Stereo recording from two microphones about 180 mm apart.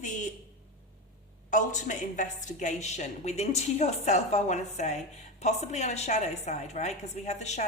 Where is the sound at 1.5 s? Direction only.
45° left (ahead or behind).